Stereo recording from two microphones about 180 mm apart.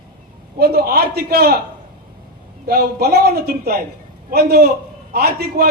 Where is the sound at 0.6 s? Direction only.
60° right (ahead or behind).